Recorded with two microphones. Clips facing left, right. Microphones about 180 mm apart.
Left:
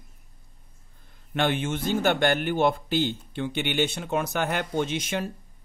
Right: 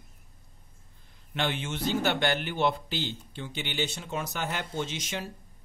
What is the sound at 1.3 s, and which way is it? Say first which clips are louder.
Speech: left 6 dB; 55° left (ahead or behind).